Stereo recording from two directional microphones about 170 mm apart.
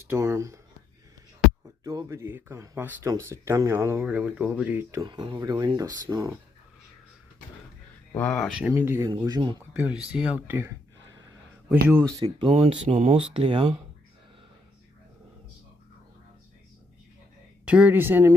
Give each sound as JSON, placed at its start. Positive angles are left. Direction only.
{"t": 0.0, "sound": "speech", "side_deg": -15}
{"t": 1.8, "sound": "speech", "side_deg": -20}
{"t": 5.0, "sound": "speech", "side_deg": -25}
{"t": 8.1, "sound": "speech", "side_deg": 5}
{"t": 8.5, "sound": "speech", "side_deg": -10}
{"t": 9.7, "sound": "speech", "side_deg": -5}
{"t": 11.9, "sound": "speech", "side_deg": -15}
{"t": 12.2, "sound": "speech", "side_deg": -30}
{"t": 13.3, "sound": "speech", "side_deg": -30}
{"t": 17.7, "sound": "speech", "side_deg": -10}